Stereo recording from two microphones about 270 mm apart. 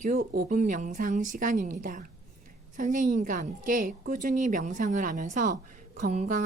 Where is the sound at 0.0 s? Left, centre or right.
Right.